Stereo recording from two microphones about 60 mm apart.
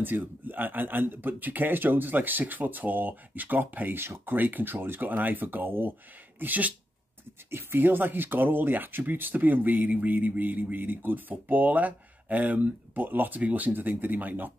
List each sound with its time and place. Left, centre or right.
0.0 s speech: right